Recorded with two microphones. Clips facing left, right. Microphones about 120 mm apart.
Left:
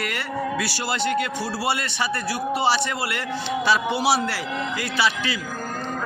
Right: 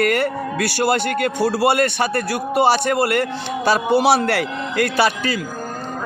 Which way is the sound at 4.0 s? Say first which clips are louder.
Right 6 dB; 60° right (ahead or behind).